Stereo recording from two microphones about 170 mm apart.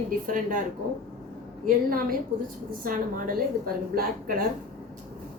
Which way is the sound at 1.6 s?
55° right (ahead or behind).